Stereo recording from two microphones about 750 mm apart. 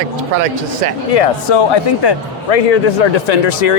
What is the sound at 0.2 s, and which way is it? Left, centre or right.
Speech, right.